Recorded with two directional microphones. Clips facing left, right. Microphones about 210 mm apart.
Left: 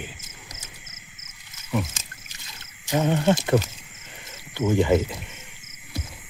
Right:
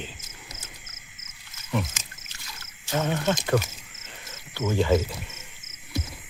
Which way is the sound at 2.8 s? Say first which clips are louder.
Left 5 dB; 15° left (ahead or behind).